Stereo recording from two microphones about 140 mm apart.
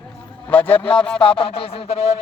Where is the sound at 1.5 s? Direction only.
45° left (ahead or behind).